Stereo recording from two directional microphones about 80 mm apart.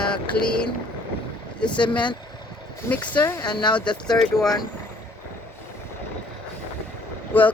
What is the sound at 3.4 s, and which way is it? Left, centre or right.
Speech, left.